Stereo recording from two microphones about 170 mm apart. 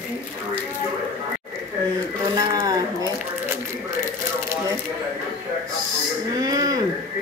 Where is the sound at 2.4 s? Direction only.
20° right (ahead or behind).